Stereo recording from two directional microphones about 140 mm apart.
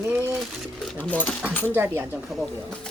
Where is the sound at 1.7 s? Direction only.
15° right (ahead or behind).